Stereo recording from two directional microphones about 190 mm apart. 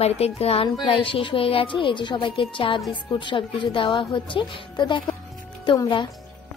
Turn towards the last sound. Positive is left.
turn(degrees=20)  # may be behind; listen again after turning